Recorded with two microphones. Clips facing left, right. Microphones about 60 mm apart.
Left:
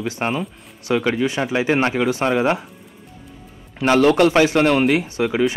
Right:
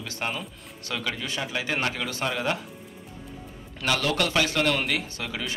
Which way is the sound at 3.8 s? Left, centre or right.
Left.